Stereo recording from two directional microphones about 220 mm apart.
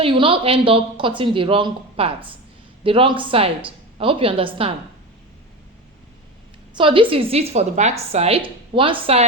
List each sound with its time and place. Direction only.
0.0 s a woman's voice: 20° right (ahead or behind)
6.7 s a woman's voice: 25° right (ahead or behind)